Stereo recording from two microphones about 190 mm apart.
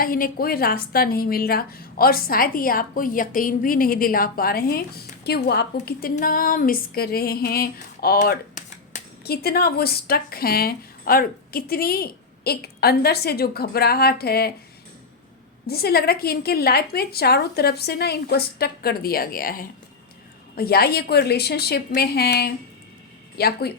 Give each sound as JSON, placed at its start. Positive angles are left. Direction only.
{"t": 0.0, "sound": "speech", "side_deg": 50}
{"t": 8.5, "sound": "shuffling cards", "side_deg": 40}
{"t": 9.2, "sound": "speech", "side_deg": 55}
{"t": 15.6, "sound": "speech", "side_deg": 55}